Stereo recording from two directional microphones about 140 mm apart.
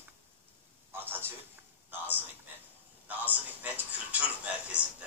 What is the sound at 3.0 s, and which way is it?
Speech, 10° right (ahead or behind).